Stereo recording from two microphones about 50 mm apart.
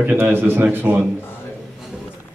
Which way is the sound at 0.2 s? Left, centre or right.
Right.